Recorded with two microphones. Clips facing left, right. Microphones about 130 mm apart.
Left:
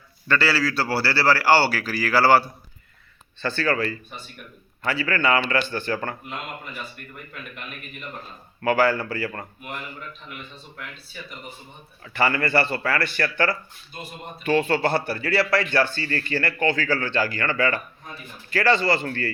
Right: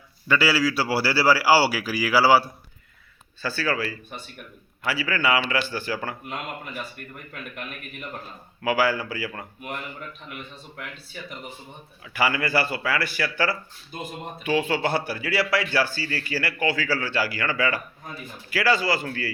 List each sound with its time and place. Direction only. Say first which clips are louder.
0.3 s a man's voice: right 1 dB; 10° right (ahead or behind)
8.6 s speech: left 2 dB; 5° right (ahead or behind)
12.0 s a man's voice: left 2 dB; 5° right (ahead or behind)